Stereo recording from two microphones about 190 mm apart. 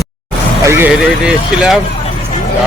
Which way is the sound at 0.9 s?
5° right (ahead or behind).